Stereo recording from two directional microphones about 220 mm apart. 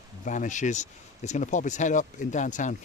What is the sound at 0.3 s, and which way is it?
Speech, 35° left (ahead or behind).